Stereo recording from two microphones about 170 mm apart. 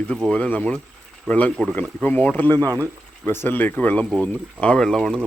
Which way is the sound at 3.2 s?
10° left (ahead or behind).